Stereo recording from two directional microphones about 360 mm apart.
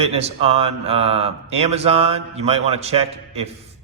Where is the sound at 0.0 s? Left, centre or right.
Centre.